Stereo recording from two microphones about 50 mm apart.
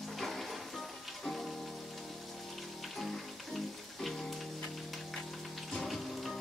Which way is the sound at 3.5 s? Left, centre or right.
Centre.